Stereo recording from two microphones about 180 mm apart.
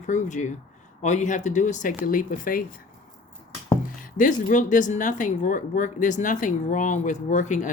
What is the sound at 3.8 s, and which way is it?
Speech, 45° left (ahead or behind).